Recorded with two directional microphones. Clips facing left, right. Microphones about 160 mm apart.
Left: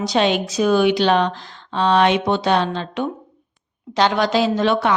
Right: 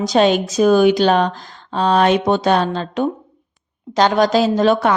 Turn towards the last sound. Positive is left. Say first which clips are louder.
# right 3 dB
turn(degrees=-45)  # may be behind; listen again after turning